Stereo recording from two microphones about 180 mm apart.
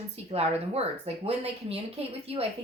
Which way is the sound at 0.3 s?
35° right (ahead or behind).